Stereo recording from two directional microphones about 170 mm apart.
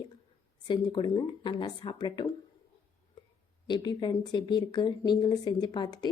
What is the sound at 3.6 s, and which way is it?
A woman's voice, 25° left (ahead or behind).